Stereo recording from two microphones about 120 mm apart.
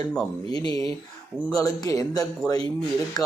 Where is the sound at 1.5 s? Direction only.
30° left (ahead or behind).